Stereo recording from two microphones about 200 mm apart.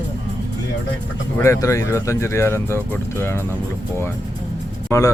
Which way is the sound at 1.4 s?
15° left (ahead or behind).